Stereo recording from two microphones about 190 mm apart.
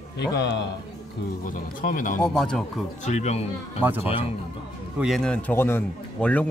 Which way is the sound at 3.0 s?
35° left (ahead or behind).